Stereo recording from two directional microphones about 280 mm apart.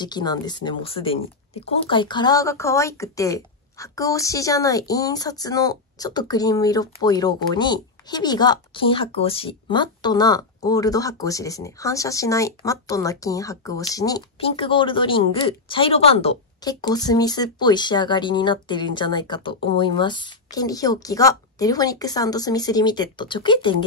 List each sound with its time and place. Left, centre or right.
0.0 s speech: centre